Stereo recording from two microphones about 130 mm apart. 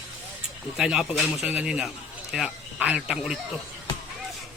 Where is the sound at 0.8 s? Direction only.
5° right (ahead or behind).